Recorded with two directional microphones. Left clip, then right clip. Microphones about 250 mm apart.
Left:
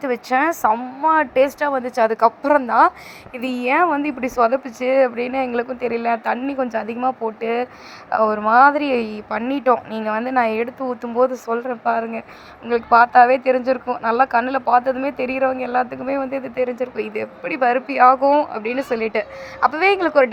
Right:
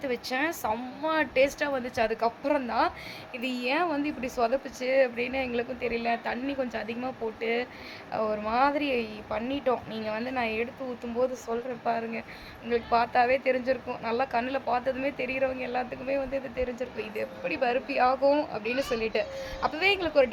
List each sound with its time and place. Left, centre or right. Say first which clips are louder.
0.0 s a woman's voice: left 11 dB; centre
8.1 s a woman's voice: left 13 dB; left